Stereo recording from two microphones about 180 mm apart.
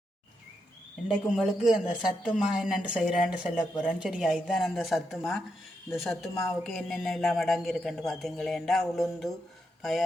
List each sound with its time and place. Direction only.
1.0 s speech: centre (ahead or behind)